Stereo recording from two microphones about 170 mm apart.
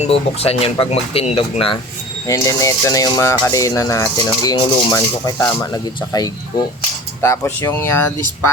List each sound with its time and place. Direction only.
0.0 s speech: 35° left (ahead or behind)
2.2 s speech: 20° left (ahead or behind)